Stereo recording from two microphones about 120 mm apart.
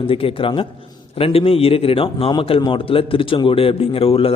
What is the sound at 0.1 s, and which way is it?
A man's voice, 50° left (ahead or behind).